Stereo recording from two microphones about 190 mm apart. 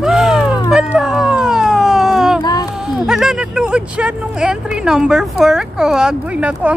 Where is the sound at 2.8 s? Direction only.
Centre (ahead or behind).